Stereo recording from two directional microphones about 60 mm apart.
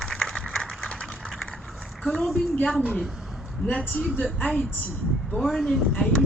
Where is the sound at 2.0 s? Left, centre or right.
Centre.